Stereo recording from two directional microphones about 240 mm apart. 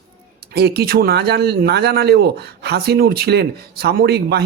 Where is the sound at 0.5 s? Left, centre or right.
Right.